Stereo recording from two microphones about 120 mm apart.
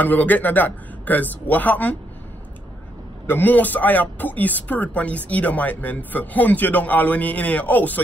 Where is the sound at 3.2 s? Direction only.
15° left (ahead or behind).